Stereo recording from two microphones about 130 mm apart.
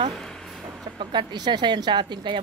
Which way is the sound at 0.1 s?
5° left (ahead or behind).